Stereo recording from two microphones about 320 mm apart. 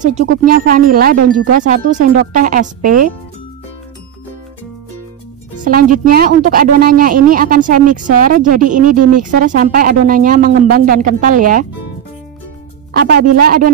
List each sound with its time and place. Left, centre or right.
0.0 s speech: right
5.6 s speech: right
12.9 s speech: right